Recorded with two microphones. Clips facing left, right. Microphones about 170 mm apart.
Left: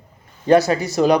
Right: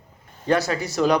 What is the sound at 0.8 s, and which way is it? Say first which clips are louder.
Speech: left 4 dB; 15° left (ahead or behind).